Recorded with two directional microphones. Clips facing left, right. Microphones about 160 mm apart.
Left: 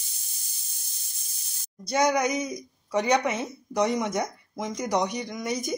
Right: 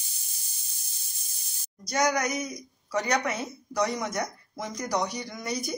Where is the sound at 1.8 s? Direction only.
25° left (ahead or behind).